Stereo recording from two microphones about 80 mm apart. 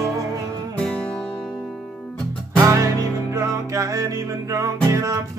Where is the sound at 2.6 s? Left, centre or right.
Right.